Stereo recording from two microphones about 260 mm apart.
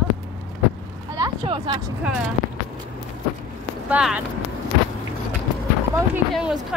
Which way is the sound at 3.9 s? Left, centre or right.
Centre.